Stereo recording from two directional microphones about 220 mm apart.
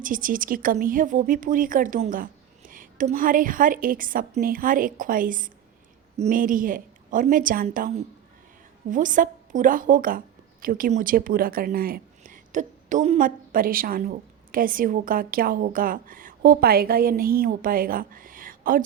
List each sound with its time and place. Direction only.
0.0 s speech: 40° right (ahead or behind)